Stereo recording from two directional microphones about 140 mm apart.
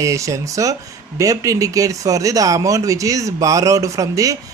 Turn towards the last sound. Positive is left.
turn(degrees=-25)  # may be behind; listen again after turning